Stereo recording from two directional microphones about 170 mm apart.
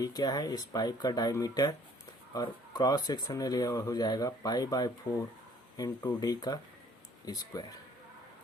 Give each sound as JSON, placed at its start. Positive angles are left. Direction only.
{"t": 0.0, "sound": "speech", "side_deg": 20}